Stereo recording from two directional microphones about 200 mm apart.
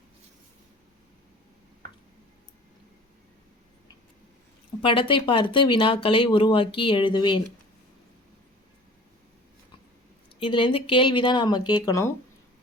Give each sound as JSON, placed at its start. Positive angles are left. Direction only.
{"t": 4.8, "sound": "speech", "side_deg": 25}
{"t": 10.4, "sound": "speech", "side_deg": 25}